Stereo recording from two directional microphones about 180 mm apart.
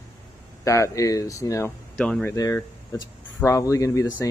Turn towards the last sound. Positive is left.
turn(degrees=15)  # may be behind; listen again after turning